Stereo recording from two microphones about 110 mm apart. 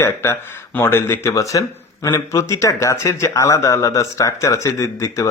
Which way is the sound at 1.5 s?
35° left (ahead or behind).